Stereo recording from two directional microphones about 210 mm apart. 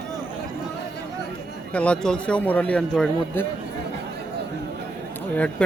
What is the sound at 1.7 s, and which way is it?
Speech, 5° left (ahead or behind).